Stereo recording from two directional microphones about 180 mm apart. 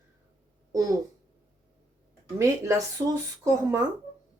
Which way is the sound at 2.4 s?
15° right (ahead or behind).